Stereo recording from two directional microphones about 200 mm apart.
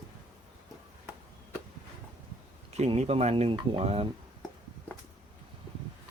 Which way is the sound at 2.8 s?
30° right (ahead or behind).